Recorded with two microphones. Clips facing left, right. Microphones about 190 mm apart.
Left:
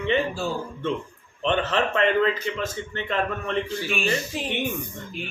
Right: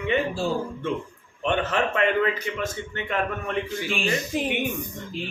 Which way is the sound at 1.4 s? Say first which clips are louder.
Left 1 dB; 10° right (ahead or behind).